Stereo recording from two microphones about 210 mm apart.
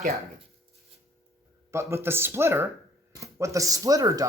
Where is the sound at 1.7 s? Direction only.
10° right (ahead or behind).